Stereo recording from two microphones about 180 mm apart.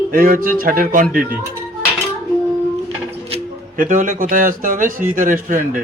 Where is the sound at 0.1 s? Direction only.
50° right (ahead or behind).